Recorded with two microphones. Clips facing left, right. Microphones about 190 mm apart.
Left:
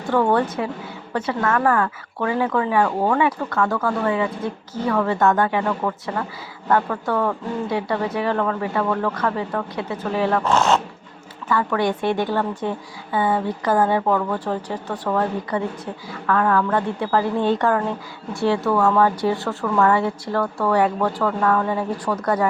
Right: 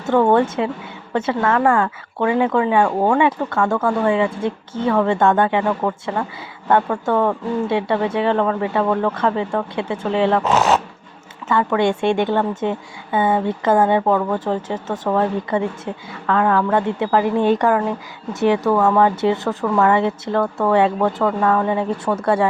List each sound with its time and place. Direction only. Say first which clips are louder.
0.1 s a woman's voice: right 4 dB; 25° right (ahead or behind)